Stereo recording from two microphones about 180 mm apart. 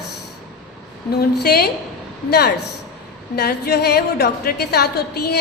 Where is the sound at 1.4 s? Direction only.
60° left (ahead or behind).